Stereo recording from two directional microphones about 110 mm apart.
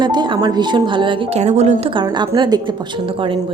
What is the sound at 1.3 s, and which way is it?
Speech, 90° right.